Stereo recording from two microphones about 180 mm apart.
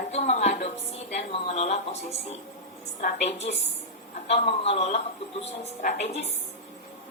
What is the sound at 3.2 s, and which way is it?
Speech, 35° left (ahead or behind).